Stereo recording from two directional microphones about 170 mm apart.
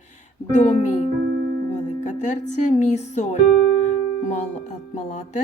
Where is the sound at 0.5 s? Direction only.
45° left (ahead or behind).